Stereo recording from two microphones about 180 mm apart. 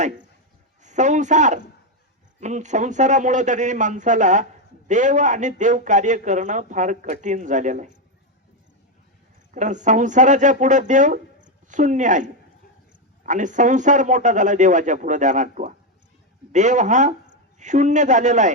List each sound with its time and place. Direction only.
0.8 s speech: 40° right (ahead or behind)
9.5 s speech: 45° right (ahead or behind)